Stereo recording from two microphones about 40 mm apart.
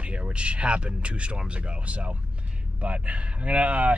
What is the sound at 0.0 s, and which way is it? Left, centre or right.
Speech, right.